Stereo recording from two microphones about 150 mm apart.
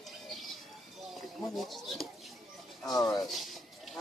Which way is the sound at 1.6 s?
Centre (ahead or behind).